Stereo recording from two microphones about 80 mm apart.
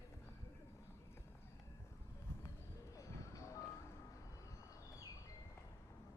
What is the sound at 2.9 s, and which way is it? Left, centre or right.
Music, left.